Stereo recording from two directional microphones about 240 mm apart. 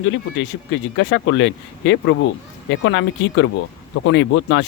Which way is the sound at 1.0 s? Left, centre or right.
Left.